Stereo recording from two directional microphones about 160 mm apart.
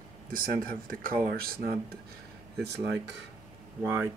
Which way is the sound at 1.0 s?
65° right (ahead or behind).